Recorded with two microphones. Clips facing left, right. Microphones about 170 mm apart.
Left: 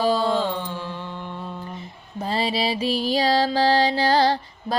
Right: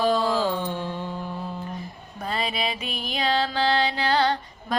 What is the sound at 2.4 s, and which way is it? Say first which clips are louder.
Music: left 6 dB; 30° left (ahead or behind).